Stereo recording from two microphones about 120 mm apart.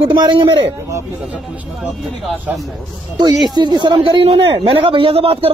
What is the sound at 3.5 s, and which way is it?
A man's voice, 35° right (ahead or behind).